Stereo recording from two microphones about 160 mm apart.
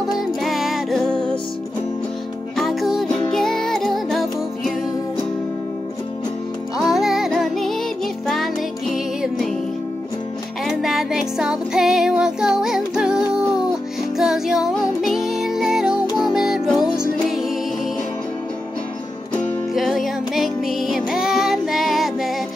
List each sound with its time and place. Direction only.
0.1 s music: centre (ahead or behind)
2.5 s music: centre (ahead or behind)
6.8 s music: centre (ahead or behind)
10.6 s music: centre (ahead or behind)
19.3 s music: centre (ahead or behind)